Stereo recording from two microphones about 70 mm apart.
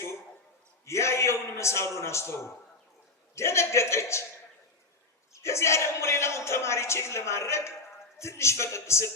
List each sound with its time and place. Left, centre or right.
0.9 s speech: left
5.3 s speech: left